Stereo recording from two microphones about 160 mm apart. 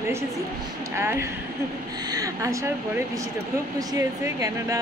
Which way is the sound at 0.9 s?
15° right (ahead or behind).